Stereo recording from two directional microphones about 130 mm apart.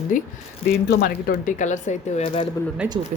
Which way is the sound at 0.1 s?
90° left.